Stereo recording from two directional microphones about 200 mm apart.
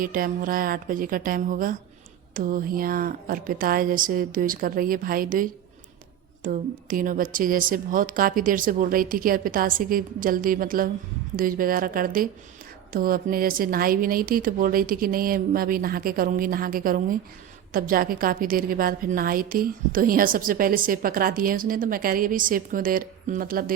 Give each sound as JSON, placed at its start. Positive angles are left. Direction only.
{"t": 0.0, "sound": "a woman's voice", "side_deg": -45}